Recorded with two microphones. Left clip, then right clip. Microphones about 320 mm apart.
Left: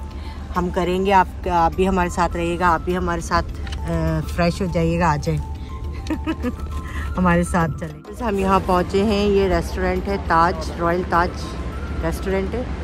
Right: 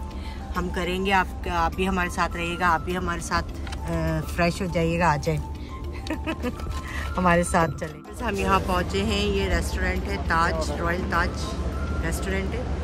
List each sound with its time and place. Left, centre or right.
0.6 s speech: centre